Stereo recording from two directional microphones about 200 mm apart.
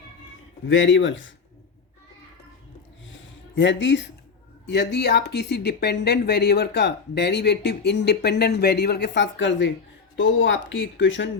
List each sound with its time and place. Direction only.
0.7 s speech: 70° left (ahead or behind)
3.5 s speech: 65° left (ahead or behind)